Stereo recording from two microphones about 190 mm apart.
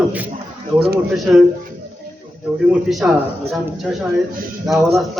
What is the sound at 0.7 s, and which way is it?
Speech, 55° right (ahead or behind).